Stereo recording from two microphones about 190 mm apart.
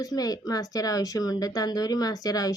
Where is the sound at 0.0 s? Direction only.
20° left (ahead or behind).